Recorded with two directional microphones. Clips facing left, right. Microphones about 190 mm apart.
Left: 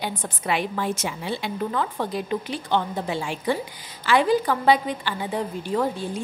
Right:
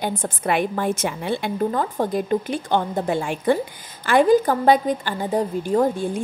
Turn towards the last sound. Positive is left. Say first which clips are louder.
# right 5 dB
turn(degrees=-45)  # may be behind; listen again after turning